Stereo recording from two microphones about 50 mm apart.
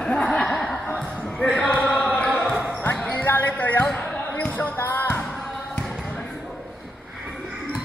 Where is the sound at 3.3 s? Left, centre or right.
Left.